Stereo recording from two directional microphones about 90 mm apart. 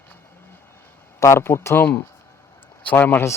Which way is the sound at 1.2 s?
30° left (ahead or behind).